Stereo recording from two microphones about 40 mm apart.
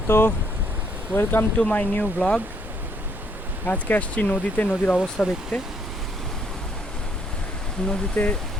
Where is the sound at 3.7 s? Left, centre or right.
Left.